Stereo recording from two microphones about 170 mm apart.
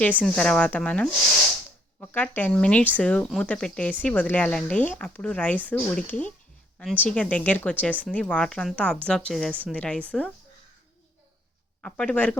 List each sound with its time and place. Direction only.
0.2 s speech: 5° left (ahead or behind)
11.8 s speech: 5° left (ahead or behind)